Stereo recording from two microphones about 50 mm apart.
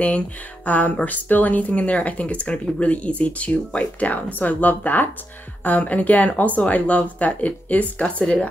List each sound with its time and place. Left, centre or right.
0.7 s speech: left